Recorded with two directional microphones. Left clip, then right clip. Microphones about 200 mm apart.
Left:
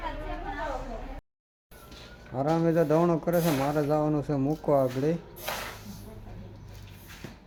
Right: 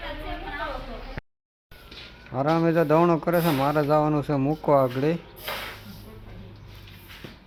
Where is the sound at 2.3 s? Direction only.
25° right (ahead or behind).